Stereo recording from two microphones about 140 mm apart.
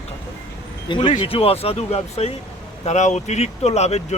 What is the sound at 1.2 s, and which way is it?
Speech, 45° left (ahead or behind).